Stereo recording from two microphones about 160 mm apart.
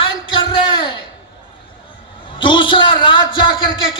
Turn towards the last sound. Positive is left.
turn(degrees=30)  # may be behind; listen again after turning